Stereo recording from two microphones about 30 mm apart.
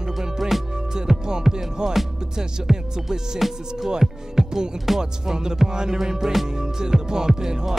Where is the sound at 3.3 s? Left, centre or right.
Centre.